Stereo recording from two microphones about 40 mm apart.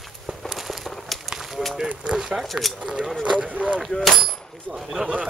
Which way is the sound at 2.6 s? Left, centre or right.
Centre.